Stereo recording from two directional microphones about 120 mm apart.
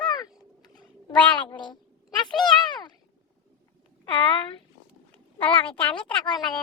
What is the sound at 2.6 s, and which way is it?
Meow, 40° left (ahead or behind).